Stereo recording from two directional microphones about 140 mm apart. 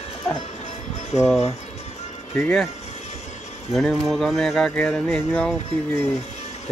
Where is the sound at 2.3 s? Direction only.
15° left (ahead or behind).